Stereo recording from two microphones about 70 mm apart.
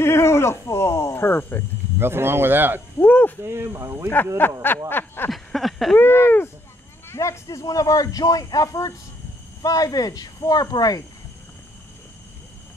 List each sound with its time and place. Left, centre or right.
0.0 s speech: left
2.0 s speech: right
3.0 s speech: left
3.4 s speech: right
4.4 s speech: left
5.3 s a sound: centre
5.9 s speech: left
7.1 s speech: left
7.5 s speech: left